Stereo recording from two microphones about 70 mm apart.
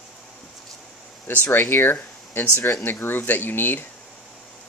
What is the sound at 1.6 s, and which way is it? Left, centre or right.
Speech, left.